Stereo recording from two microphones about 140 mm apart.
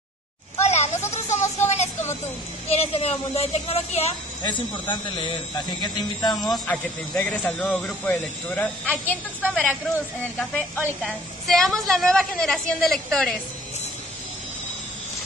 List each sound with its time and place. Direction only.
0.6 s children playing: 50° left (ahead or behind)
1.1 s a sound: 55° left (ahead or behind)
2.0 s a man's voice: 15° left (ahead or behind)
2.7 s a woman's voice: 50° left (ahead or behind)
4.5 s speech: 35° left (ahead or behind)
6.4 s a woman's voice: centre (ahead or behind)
7.2 s a man's voice: 10° left (ahead or behind)